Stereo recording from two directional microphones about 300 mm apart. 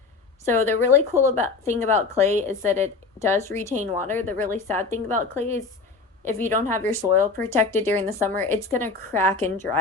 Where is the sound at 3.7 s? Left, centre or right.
Right.